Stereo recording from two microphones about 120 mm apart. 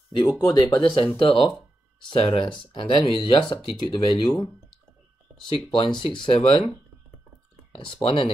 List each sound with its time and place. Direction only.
0.1 s speech: 35° left (ahead or behind)
5.7 s speech: 45° left (ahead or behind)
7.7 s speech: 45° left (ahead or behind)